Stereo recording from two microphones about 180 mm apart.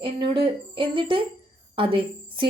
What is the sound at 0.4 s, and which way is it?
A woman's voice, 30° right (ahead or behind).